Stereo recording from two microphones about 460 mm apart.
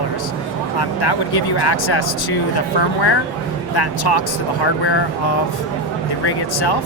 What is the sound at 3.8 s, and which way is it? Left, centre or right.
Speech, left.